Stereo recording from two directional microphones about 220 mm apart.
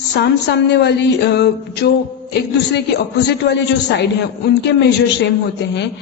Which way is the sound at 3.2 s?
50° left (ahead or behind).